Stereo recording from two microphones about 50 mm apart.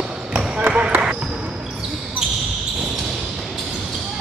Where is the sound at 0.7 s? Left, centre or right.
Right.